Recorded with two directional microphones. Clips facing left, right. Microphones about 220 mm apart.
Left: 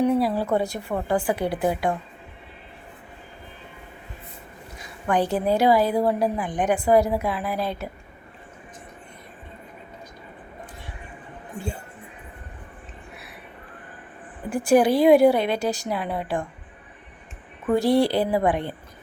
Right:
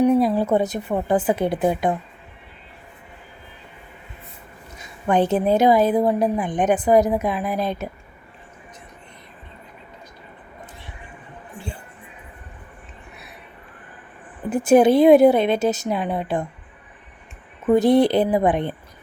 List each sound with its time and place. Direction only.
0.0 s a woman's voice: 20° right (ahead or behind)
4.8 s a woman's voice: 20° right (ahead or behind)
14.5 s a woman's voice: 20° right (ahead or behind)
17.7 s a woman's voice: 20° right (ahead or behind)